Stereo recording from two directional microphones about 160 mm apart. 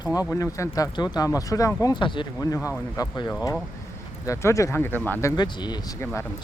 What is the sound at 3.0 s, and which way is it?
Speech, 20° left (ahead or behind).